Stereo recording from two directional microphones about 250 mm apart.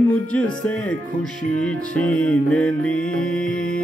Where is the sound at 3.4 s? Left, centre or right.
Left.